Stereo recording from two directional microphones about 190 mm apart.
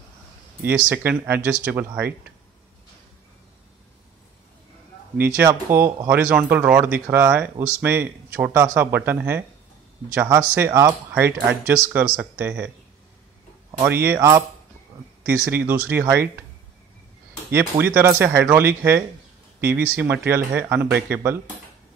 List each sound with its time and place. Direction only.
0.6 s speech: 10° right (ahead or behind)
5.1 s speech: 10° right (ahead or behind)
10.5 s speech: 10° right (ahead or behind)
13.8 s speech: 10° right (ahead or behind)
17.6 s speech: 10° right (ahead or behind)